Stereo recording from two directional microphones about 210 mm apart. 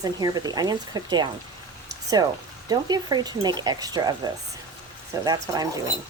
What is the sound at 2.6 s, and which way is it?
Speech, 20° right (ahead or behind).